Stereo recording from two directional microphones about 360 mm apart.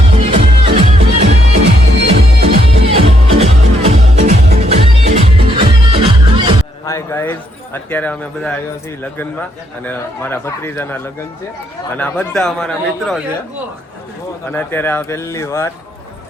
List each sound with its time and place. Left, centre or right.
0.1 s music: centre
6.8 s a sound: centre
9.8 s a man's voice: centre
14.5 s speech: centre